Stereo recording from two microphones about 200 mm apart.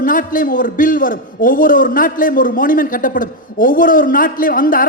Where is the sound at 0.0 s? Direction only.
45° left (ahead or behind).